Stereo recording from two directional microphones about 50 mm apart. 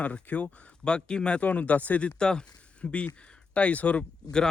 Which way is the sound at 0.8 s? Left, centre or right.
Centre.